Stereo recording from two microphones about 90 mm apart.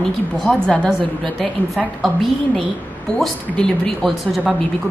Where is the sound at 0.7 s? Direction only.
Centre (ahead or behind).